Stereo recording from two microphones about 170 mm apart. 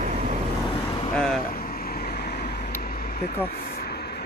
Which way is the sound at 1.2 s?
5° left (ahead or behind).